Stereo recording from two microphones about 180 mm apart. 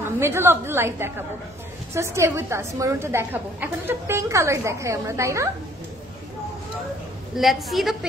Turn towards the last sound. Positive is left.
turn(degrees=0)  # may be behind; listen again after turning